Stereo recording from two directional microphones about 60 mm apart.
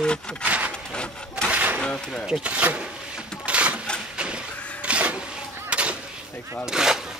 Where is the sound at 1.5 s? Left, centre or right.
Right.